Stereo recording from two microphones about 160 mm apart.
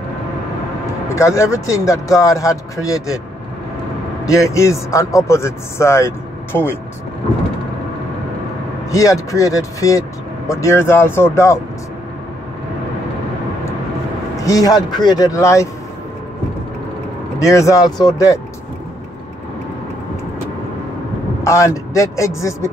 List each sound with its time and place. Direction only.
1.0 s speech: 20° left (ahead or behind)
4.3 s speech: 20° left (ahead or behind)
8.9 s speech: 20° left (ahead or behind)
14.3 s speech: 20° left (ahead or behind)
17.4 s speech: 20° left (ahead or behind)
21.5 s speech: 20° left (ahead or behind)